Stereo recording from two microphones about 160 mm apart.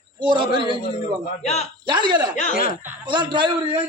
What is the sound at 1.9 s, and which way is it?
Speech, 30° right (ahead or behind).